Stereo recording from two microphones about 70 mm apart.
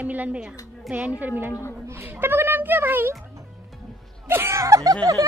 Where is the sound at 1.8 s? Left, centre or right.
Right.